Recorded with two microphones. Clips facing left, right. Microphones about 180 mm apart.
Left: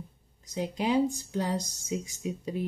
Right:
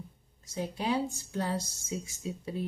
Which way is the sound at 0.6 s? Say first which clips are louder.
Left 4 dB; 15° left (ahead or behind).